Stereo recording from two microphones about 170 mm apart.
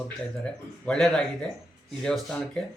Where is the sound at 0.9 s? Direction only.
5° left (ahead or behind).